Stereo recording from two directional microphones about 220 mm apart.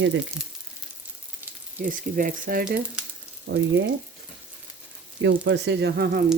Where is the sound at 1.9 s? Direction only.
40° right (ahead or behind).